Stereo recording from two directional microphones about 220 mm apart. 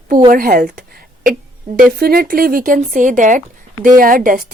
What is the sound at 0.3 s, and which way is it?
A woman's voice, 40° right (ahead or behind).